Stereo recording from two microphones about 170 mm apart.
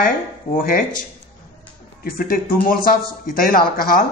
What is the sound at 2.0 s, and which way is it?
Speech, 60° left (ahead or behind).